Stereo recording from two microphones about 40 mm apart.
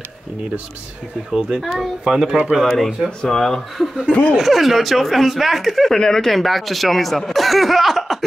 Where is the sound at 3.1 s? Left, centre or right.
Left.